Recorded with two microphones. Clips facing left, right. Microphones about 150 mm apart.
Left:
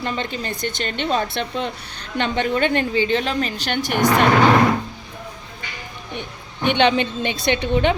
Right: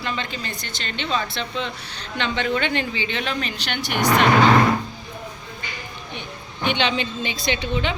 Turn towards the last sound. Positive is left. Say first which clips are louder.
# left 6 dB
turn(degrees=55)  # may be behind; listen again after turning